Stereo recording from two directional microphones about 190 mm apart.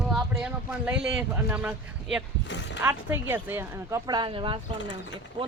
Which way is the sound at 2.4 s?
70° left (ahead or behind).